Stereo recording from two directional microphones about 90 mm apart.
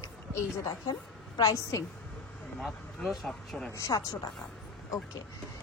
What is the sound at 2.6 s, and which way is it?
Speech, centre (ahead or behind).